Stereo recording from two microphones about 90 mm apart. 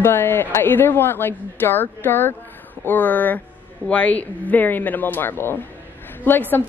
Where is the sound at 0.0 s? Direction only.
25° left (ahead or behind).